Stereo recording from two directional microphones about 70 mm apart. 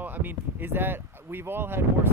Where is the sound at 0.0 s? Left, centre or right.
Right.